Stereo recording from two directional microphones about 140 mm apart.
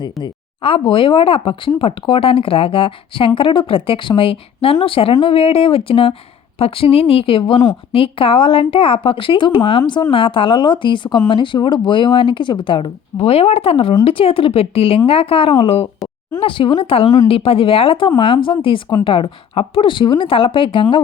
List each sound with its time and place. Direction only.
0.0 s speech: 35° left (ahead or behind)